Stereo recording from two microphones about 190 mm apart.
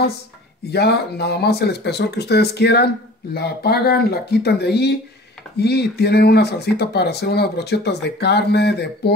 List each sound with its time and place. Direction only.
0.7 s speech: 60° left (ahead or behind)